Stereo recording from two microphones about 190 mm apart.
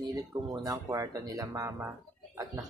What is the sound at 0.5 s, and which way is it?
A child's voice, 20° right (ahead or behind).